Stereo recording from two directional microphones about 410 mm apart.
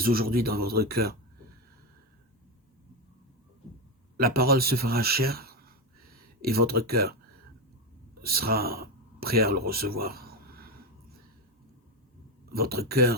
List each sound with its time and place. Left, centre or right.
0.0 s speech: right
4.2 s speech: right
8.2 s speech: right
9.6 s a sound: right
12.5 s speech: right